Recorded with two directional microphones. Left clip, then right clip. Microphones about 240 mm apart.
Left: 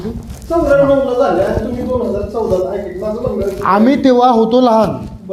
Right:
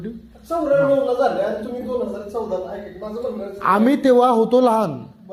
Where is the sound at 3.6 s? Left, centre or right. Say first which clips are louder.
Left 4 dB; right.